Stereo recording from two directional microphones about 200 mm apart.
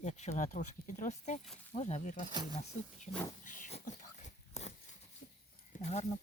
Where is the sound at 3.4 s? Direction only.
40° left (ahead or behind).